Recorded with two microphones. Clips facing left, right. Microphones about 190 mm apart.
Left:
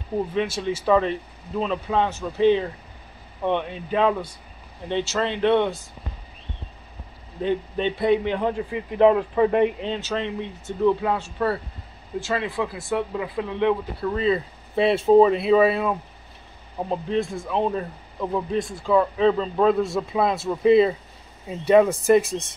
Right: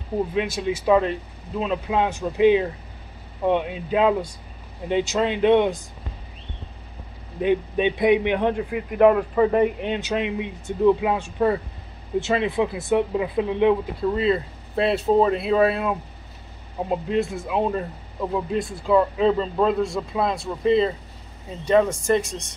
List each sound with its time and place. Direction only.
0.3 s speech: 10° right (ahead or behind)
7.4 s speech: 15° right (ahead or behind)
8.5 s speech: 60° right (ahead or behind)
9.8 s speech: 15° right (ahead or behind)
14.1 s speech: centre (ahead or behind)